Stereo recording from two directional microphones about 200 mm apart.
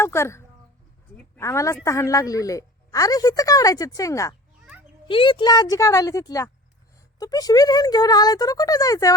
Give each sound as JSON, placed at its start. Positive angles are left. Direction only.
{"t": 0.0, "sound": "a woman's voice", "side_deg": 15}
{"t": 4.6, "sound": "a sound", "side_deg": -5}
{"t": 5.0, "sound": "a woman's voice", "side_deg": 25}